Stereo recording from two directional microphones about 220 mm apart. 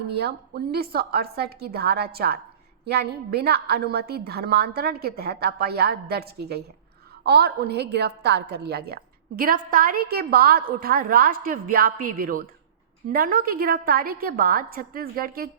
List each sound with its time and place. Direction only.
0.1 s a woman's voice: 45° right (ahead or behind)